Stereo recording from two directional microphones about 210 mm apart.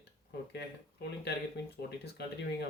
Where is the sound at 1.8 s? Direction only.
50° left (ahead or behind).